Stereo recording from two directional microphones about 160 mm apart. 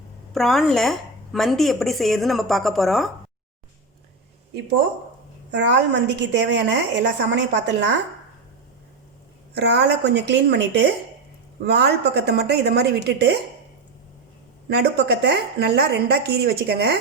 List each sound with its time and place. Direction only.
0.3 s a woman's voice: centre (ahead or behind)
5.5 s a woman's voice: 90° right
9.6 s a woman's voice: 90° right
14.7 s a woman's voice: 90° right